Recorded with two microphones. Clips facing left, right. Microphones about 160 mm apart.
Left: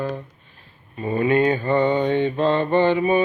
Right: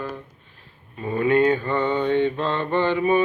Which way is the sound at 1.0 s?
10° left (ahead or behind).